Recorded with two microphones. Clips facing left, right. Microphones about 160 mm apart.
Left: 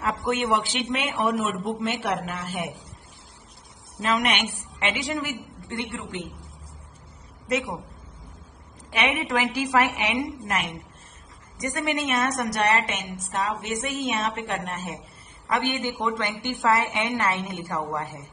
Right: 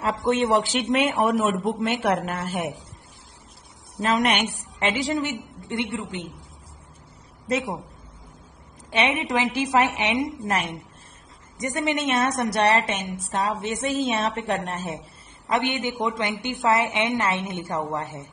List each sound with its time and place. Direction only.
0.3 s a man's voice: 30° right (ahead or behind)
4.0 s a woman's voice: 40° right (ahead or behind); by 6.4 s 20° right (ahead or behind)
7.4 s a woman's voice: 30° right (ahead or behind)
8.9 s a woman's voice: 25° right (ahead or behind)
11.5 s a woman's voice: 20° right (ahead or behind)
15.4 s a woman's voice: 20° right (ahead or behind)